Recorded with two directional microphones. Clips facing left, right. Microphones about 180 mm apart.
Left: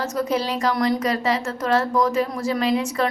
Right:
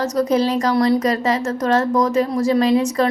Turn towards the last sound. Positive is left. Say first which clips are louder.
# right 5 dB
turn(degrees=-40)  # may be behind; listen again after turning